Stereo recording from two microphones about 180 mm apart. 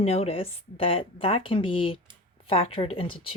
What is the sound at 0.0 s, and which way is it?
Speech, 35° left (ahead or behind).